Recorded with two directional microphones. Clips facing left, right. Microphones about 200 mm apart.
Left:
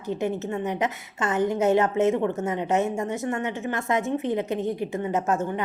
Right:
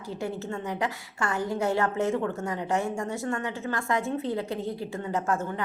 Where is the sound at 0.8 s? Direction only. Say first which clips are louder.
Left 3 dB; 20° left (ahead or behind).